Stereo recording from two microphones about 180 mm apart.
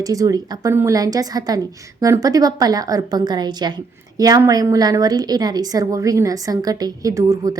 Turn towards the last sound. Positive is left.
turn(degrees=-20)  # may be behind; listen again after turning